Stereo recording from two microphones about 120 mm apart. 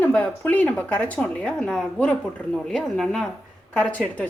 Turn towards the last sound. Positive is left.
turn(degrees=10)  # may be behind; listen again after turning